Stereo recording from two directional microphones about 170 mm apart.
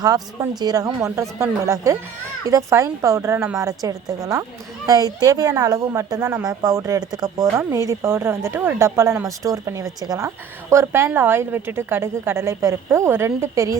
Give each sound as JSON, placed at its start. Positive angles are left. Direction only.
{"t": 0.6, "sound": "a woman's voice", "side_deg": -25}